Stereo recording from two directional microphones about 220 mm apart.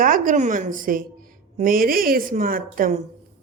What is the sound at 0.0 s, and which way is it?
Speech, 40° right (ahead or behind).